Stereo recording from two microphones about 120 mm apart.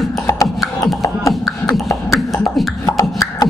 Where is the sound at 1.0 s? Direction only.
25° left (ahead or behind).